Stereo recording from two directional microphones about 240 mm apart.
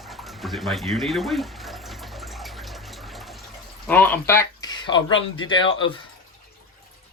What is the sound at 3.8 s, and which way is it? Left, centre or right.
Speech, centre.